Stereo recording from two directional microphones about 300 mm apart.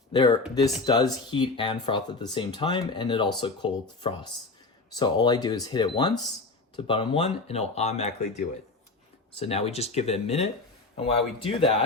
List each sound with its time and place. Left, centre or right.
0.1 s speech: centre
9.3 s speech: centre